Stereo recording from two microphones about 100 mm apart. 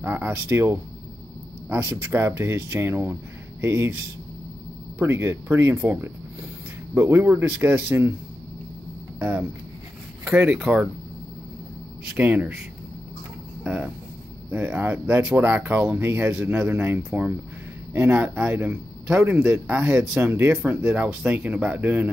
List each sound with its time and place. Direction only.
0.0 s speech: 20° right (ahead or behind)
9.2 s speech: 15° right (ahead or behind)
12.2 s speech: 15° right (ahead or behind)
14.5 s speech: 20° right (ahead or behind)